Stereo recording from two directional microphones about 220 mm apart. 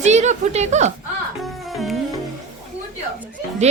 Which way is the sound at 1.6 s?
Centre (ahead or behind).